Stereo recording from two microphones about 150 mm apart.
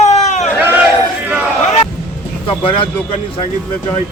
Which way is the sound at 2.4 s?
35° left (ahead or behind).